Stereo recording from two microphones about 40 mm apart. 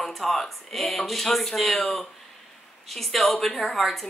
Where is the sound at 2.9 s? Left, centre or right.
Centre.